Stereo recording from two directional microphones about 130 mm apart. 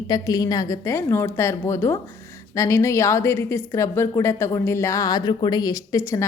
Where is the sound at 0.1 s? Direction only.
30° left (ahead or behind).